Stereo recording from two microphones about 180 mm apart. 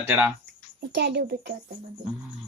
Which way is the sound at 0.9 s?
70° right (ahead or behind).